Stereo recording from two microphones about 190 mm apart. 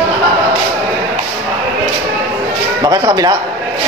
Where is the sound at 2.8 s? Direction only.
20° right (ahead or behind).